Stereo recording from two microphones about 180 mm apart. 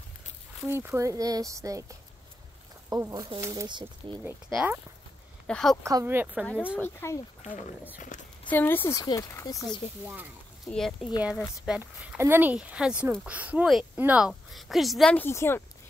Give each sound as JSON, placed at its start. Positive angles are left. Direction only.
{"t": 0.7, "sound": "speech", "side_deg": -15}
{"t": 4.5, "sound": "a woman's voice", "side_deg": -5}
{"t": 5.9, "sound": "speech", "side_deg": -15}
{"t": 6.8, "sound": "speech", "side_deg": 15}
{"t": 8.1, "sound": "a sound", "side_deg": 45}
{"t": 8.5, "sound": "speech", "side_deg": 10}
{"t": 10.7, "sound": "a woman's voice", "side_deg": 0}